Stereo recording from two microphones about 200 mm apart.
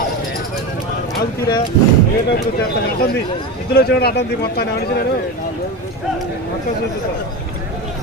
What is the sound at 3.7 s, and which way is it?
A man's voice, 55° left (ahead or behind).